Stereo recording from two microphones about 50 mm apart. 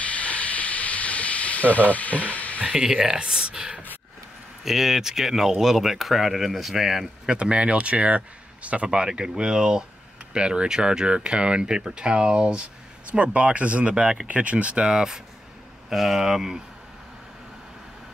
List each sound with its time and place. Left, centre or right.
0.1 s steam: left
2.6 s speech: centre
3.2 s a sound: centre
4.6 s speech: centre
7.2 s speech: right
15.9 s speech: centre